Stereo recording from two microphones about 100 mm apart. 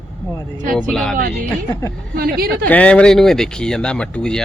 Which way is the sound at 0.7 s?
5° left (ahead or behind).